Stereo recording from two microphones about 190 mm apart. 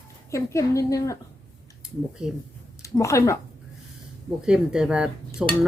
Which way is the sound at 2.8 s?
15° left (ahead or behind).